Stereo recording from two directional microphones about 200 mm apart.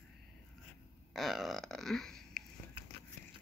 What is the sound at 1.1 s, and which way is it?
Speech, centre (ahead or behind).